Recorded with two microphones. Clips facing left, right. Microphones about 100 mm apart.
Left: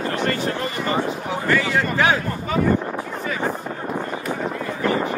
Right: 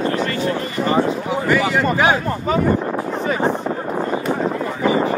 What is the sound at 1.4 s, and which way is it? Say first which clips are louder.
Speech: right 3 dB; 15° right (ahead or behind).